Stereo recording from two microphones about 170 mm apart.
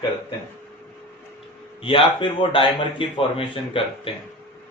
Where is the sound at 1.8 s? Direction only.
30° left (ahead or behind).